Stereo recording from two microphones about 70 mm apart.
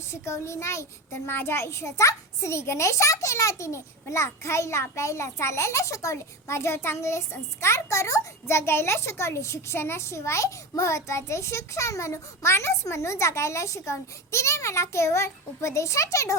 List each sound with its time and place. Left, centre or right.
0.1 s a child's voice: left